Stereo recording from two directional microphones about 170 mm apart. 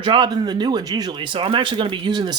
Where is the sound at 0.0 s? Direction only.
30° right (ahead or behind).